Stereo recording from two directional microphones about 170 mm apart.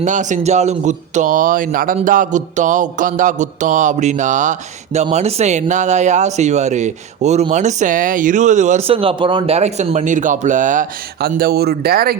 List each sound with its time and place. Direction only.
0.0 s speech: 45° right (ahead or behind); by 12.1 s 65° right (ahead or behind)